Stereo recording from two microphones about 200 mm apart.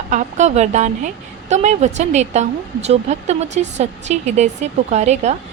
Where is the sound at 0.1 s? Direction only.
35° right (ahead or behind).